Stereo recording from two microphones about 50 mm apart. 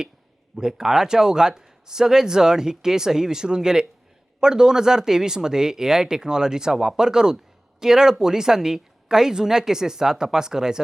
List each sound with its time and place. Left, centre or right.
0.5 s speech: centre